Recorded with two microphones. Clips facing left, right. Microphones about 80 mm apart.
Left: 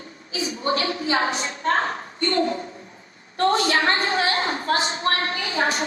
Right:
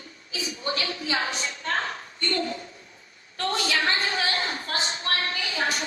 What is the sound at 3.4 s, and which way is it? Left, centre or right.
A woman's voice, left.